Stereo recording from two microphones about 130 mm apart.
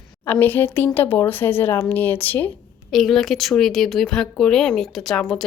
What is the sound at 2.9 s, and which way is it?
Speech, centre (ahead or behind).